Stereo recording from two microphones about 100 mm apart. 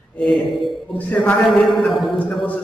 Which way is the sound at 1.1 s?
15° left (ahead or behind).